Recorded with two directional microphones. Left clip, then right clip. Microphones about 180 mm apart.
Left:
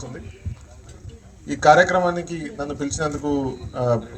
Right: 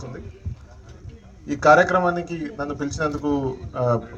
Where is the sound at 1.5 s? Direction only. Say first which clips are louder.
Left 1 dB; 25° left (ahead or behind).